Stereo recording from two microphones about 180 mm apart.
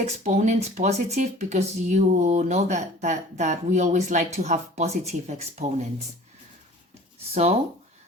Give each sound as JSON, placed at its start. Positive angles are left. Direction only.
{"t": 0.0, "sound": "speech", "side_deg": -40}
{"t": 7.3, "sound": "speech", "side_deg": -35}